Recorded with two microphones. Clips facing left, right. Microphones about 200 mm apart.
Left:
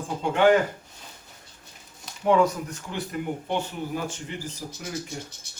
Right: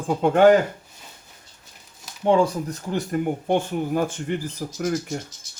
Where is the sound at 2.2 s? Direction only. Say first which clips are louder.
Right 2 dB; 30° right (ahead or behind); by 5.2 s 55° right (ahead or behind).